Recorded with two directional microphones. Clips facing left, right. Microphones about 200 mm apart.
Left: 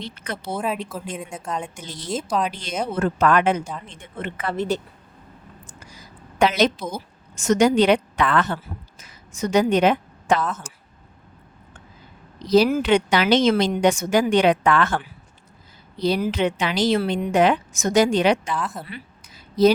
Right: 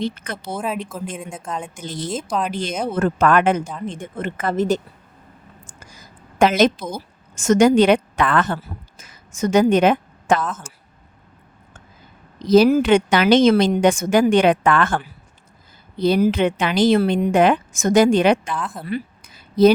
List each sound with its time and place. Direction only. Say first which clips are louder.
0.5 s a woman's voice: right 1 dB; centre (ahead or behind)
1.7 s a woman's voice: right 2 dB; 50° right (ahead or behind)
5.8 s a sound: left 1 dB; 45° right (ahead or behind)
7.3 s a woman's voice: right 3 dB; 50° right (ahead or behind)
10.4 s a woman's voice: even; centre (ahead or behind)
12.5 s a woman's voice: right 4 dB; 45° right (ahead or behind)
18.5 s a woman's voice: even; centre (ahead or behind)
18.9 s a sound: right 12 dB; 50° right (ahead or behind)